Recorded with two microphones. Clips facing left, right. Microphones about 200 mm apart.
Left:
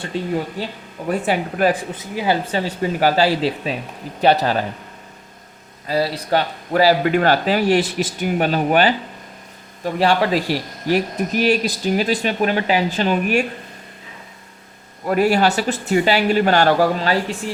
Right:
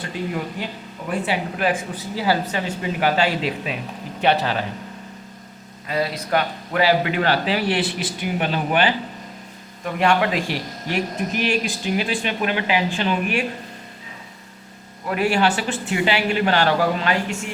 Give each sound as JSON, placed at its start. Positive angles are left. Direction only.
{"t": 0.1, "sound": "speech", "side_deg": 30}
{"t": 0.6, "sound": "speech", "side_deg": 45}
{"t": 2.0, "sound": "speech", "side_deg": 20}
{"t": 5.9, "sound": "speech", "side_deg": 35}
{"t": 15.0, "sound": "speech", "side_deg": 40}